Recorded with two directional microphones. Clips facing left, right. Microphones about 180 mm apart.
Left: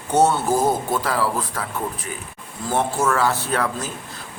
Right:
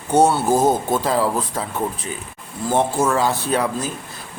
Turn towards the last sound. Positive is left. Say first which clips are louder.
# right 3 dB
turn(degrees=-15)  # may be behind; listen again after turning